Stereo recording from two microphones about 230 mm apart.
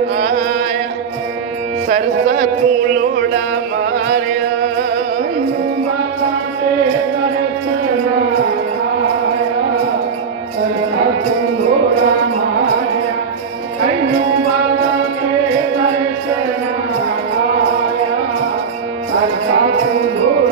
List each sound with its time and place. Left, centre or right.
1.9 s speech: right